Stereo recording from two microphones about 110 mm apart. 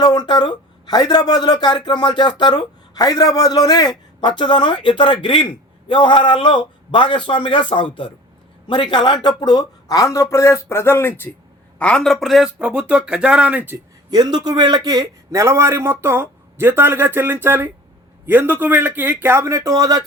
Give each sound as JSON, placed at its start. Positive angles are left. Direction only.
{"t": 0.0, "sound": "a man's voice", "side_deg": 40}
{"t": 11.8, "sound": "speech", "side_deg": 10}
{"t": 14.1, "sound": "a man's voice", "side_deg": -40}